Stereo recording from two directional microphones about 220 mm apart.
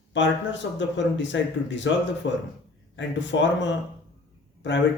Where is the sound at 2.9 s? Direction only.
55° left (ahead or behind).